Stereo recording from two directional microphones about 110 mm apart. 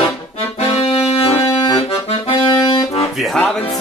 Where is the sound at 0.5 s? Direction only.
60° left (ahead or behind).